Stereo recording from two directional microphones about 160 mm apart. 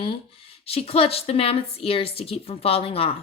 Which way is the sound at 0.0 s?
35° left (ahead or behind).